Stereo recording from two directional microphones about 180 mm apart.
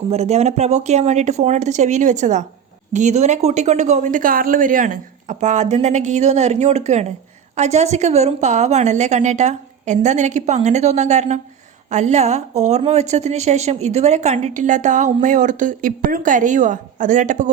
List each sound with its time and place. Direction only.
0.1 s a woman's voice: 35° right (ahead or behind)